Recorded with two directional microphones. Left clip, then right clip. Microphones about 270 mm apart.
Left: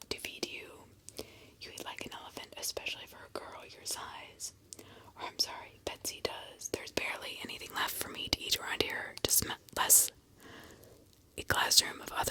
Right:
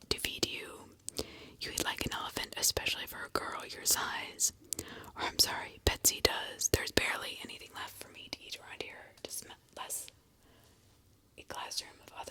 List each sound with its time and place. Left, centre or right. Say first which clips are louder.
0.1 s whispering: right 5 dB; right
7.4 s whispering: left 8 dB; centre; by 10.6 s left
11.3 s speech: left 13 dB; left